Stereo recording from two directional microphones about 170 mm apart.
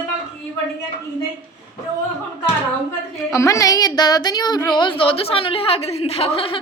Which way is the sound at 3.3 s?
20° left (ahead or behind).